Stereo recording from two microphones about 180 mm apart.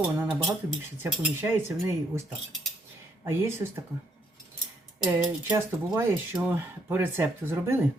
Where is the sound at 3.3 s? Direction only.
15° right (ahead or behind).